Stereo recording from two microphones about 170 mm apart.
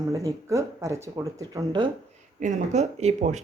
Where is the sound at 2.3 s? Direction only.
45° right (ahead or behind).